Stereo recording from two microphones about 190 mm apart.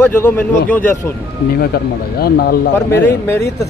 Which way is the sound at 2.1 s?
55° left (ahead or behind).